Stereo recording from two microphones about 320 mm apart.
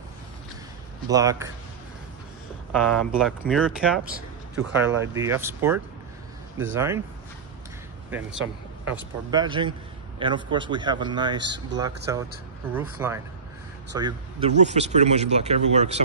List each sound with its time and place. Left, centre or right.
1.0 s a man's voice: centre
2.7 s a man's voice: centre
8.1 s a man's voice: centre